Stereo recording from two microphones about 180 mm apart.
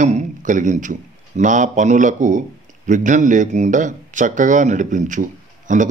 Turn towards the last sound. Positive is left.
turn(degrees=-45)  # may be behind; listen again after turning